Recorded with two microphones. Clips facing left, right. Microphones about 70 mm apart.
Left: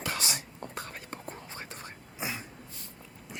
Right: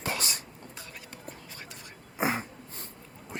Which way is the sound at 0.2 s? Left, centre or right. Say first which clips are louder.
Left 1 dB; right.